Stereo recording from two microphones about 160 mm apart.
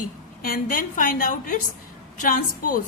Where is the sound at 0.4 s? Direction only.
60° left (ahead or behind).